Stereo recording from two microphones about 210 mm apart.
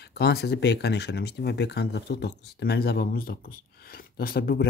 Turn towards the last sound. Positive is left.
turn(degrees=45)  # may be behind; listen again after turning